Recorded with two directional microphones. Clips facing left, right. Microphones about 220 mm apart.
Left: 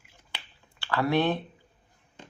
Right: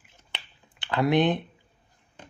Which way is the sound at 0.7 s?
20° right (ahead or behind).